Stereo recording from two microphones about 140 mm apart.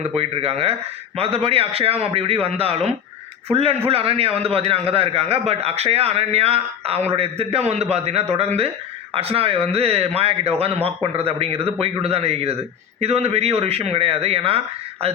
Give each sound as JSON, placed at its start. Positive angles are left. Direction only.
{"t": 0.1, "sound": "a man's voice", "side_deg": -45}